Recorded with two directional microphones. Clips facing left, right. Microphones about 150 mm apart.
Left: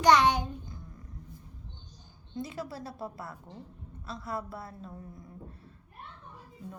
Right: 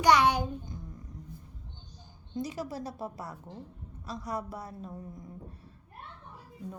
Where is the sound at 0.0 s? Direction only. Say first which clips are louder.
Left 1 dB; 10° right (ahead or behind).